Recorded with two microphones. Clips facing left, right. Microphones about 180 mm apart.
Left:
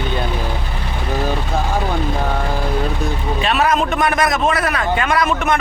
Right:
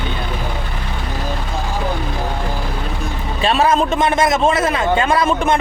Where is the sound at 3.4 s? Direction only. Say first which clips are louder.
Right 3 dB; 30° right (ahead or behind).